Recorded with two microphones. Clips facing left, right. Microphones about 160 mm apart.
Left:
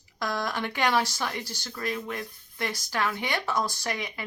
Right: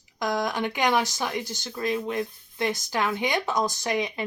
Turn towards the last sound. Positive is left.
turn(degrees=-20)  # may be behind; listen again after turning